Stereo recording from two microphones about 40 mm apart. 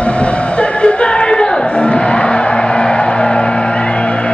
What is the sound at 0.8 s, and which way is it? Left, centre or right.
Music, left.